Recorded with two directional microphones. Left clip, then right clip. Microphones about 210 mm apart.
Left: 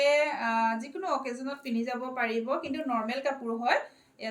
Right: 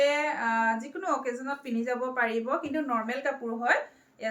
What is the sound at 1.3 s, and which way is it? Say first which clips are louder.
A woman's voice: right 3 dB; 15° right (ahead or behind).